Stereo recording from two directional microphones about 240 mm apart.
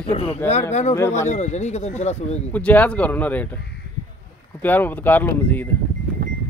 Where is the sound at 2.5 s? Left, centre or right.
Centre.